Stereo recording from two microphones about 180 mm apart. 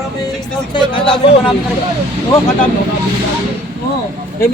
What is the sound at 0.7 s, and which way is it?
Speech, 30° left (ahead or behind).